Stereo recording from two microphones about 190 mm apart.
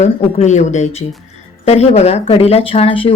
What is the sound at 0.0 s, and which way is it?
Speech, 40° left (ahead or behind).